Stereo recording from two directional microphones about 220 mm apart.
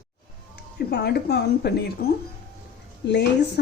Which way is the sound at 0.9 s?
50° left (ahead or behind).